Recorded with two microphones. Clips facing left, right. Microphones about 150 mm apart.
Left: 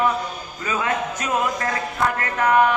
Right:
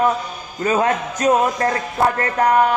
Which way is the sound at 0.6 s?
40° right (ahead or behind).